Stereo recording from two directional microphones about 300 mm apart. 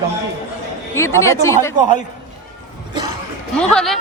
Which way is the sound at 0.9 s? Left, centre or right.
Centre.